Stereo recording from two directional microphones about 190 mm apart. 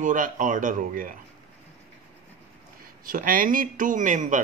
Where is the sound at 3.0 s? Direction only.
45° right (ahead or behind).